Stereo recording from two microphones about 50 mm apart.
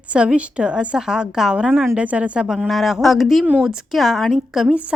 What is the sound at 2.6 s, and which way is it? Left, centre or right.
A woman's voice, centre.